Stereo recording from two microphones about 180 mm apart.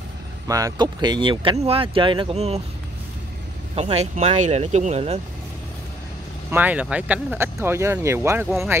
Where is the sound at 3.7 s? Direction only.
35° right (ahead or behind).